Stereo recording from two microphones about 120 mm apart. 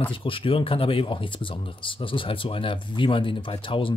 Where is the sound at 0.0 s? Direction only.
45° left (ahead or behind).